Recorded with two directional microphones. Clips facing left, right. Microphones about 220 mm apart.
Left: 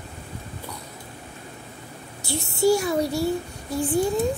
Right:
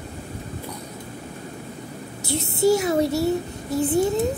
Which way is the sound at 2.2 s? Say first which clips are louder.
Right 1 dB; 20° right (ahead or behind).